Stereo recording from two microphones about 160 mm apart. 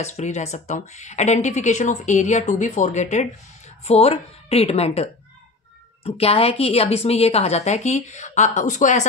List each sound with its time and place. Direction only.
0.0 s a woman's voice: 45° left (ahead or behind)